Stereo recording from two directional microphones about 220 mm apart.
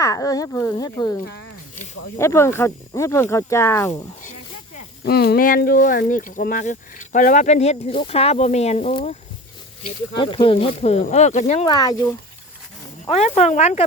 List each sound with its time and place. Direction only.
0.0 s speech: 15° left (ahead or behind)
2.1 s speech: 10° left (ahead or behind)
5.0 s speech: 45° left (ahead or behind); by 9.1 s 30° left (ahead or behind)
10.2 s speech: 25° left (ahead or behind)
11.7 s speech: 15° left (ahead or behind)
13.1 s speech: 30° left (ahead or behind)